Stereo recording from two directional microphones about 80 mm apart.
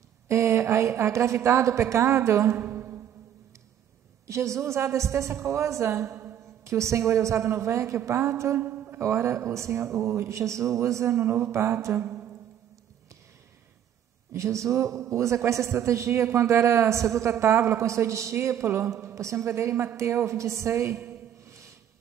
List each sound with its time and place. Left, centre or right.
0.3 s a man's voice: right
2.5 s a sound: right
4.3 s a man's voice: right
6.1 s a sound: right
6.4 s a woman's voice: right
9.0 s a man's voice: right
14.3 s a man's voice: right